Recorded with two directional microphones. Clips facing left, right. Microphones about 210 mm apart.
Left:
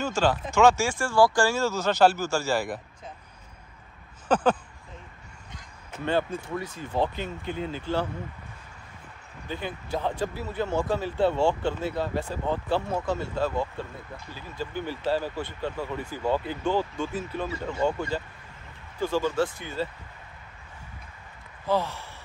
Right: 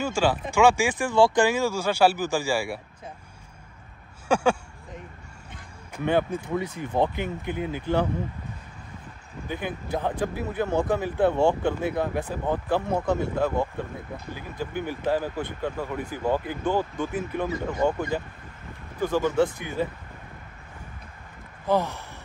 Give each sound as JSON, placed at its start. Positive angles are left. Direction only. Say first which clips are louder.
{"t": 0.0, "sound": "speech", "louder": "right 1 dB", "side_deg": -10}
{"t": 4.3, "sound": "speech", "louder": "right 1 dB", "side_deg": -10}
{"t": 5.9, "sound": "speech", "louder": "right 3 dB", "side_deg": -15}
{"t": 9.5, "sound": "speech", "louder": "right 2 dB", "side_deg": -15}
{"t": 21.6, "sound": "speech", "louder": "right 2 dB", "side_deg": -15}